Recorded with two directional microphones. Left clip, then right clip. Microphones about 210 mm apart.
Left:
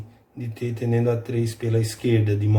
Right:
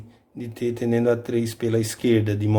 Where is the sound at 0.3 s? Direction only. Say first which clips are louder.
Right 4 dB; 50° right (ahead or behind).